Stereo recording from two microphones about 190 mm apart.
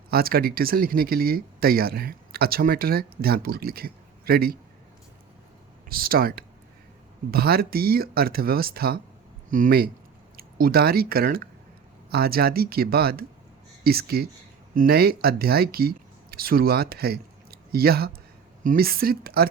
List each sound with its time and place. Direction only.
0.1 s speech: 50° right (ahead or behind)
5.9 s speech: 50° right (ahead or behind)